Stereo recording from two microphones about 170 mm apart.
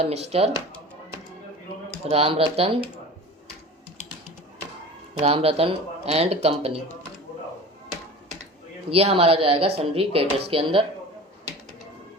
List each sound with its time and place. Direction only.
0.0 s speech: 40° right (ahead or behind)
2.0 s speech: 35° right (ahead or behind)
5.2 s speech: 35° right (ahead or behind)
8.9 s speech: 35° right (ahead or behind)